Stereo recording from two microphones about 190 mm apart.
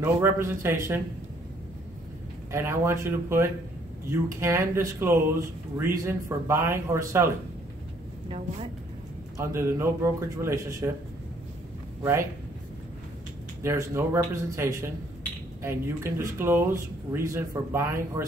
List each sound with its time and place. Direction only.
0.0 s speech: 10° right (ahead or behind)
2.5 s speech: 15° right (ahead or behind)
9.4 s speech: 15° right (ahead or behind)
12.0 s a man's voice: 15° right (ahead or behind)
13.6 s speech: 15° right (ahead or behind)